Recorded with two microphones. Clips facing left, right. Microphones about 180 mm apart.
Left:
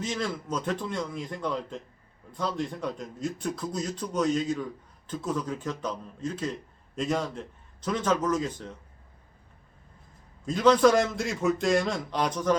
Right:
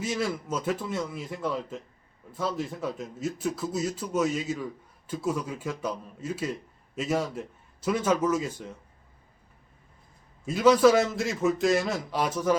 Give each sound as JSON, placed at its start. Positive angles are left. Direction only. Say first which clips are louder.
{"t": 0.0, "sound": "a man's voice", "louder": "right 2 dB", "side_deg": -10}
{"t": 10.4, "sound": "a man's voice", "louder": "right 1 dB", "side_deg": -5}